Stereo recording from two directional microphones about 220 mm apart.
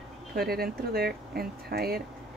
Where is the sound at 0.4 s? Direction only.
45° right (ahead or behind).